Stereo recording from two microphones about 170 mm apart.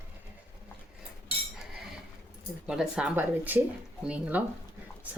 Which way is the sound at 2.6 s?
5° right (ahead or behind).